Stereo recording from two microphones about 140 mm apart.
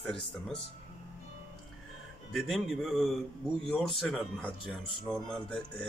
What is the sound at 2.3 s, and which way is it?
A man's voice, centre (ahead or behind).